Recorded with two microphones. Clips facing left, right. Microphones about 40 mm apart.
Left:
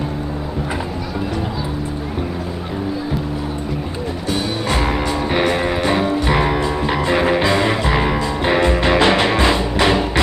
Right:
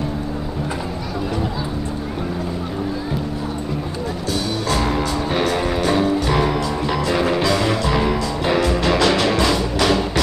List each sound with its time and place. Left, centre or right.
4.3 s music: left